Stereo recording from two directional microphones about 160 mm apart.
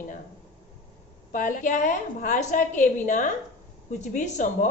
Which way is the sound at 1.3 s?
55° left (ahead or behind).